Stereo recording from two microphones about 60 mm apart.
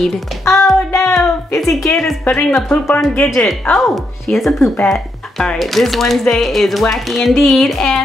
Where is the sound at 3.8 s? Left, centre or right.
Centre.